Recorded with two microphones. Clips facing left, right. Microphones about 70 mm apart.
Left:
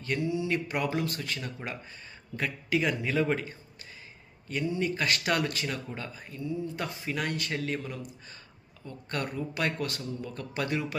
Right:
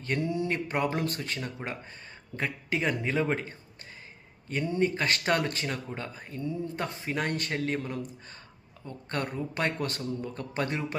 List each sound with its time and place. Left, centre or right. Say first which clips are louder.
0.2 s speech: left 1 dB; right
1.6 s speech: right 1 dB; right
2.3 s speech: left 2 dB; right
4.8 s speech: right 5 dB; right